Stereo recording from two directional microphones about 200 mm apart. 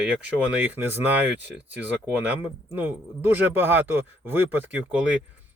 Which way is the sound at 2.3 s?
10° right (ahead or behind).